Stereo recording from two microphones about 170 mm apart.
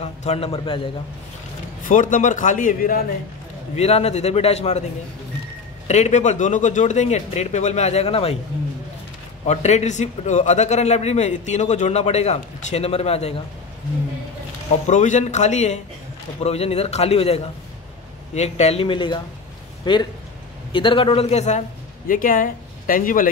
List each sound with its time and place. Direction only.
0.0 s a man's voice: 40° left (ahead or behind)
1.9 s speech: 50° left (ahead or behind)
3.7 s a man's voice: 40° left (ahead or behind)
5.9 s speech: 45° left (ahead or behind)
9.5 s a man's voice: 40° left (ahead or behind)
14.9 s a man's voice: 45° left (ahead or behind)